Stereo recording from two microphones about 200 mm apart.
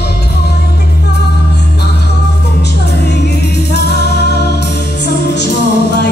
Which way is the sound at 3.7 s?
55° left (ahead or behind).